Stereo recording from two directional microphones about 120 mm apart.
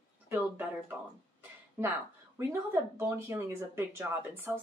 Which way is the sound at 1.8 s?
20° right (ahead or behind).